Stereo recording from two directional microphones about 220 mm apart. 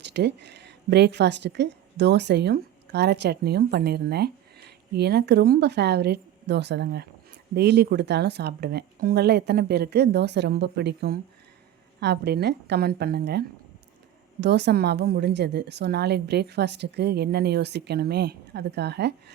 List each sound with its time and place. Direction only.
0.0 s a woman's voice: 50° right (ahead or behind)
14.4 s a woman's voice: 50° right (ahead or behind)